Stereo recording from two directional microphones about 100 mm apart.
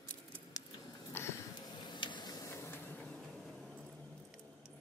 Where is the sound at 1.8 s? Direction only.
50° left (ahead or behind).